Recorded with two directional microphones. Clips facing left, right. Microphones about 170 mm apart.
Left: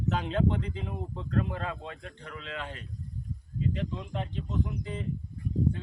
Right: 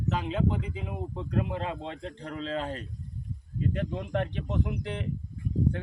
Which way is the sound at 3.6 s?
55° right (ahead or behind).